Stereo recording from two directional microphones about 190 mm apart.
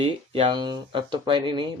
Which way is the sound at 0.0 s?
30° right (ahead or behind).